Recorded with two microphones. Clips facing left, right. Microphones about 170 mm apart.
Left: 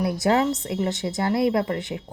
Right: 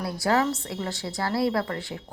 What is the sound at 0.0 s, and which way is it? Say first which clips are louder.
Speech: left 3 dB; 20° left (ahead or behind).